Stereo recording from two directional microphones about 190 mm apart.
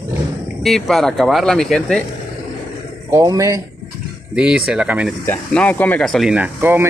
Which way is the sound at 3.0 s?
15° right (ahead or behind).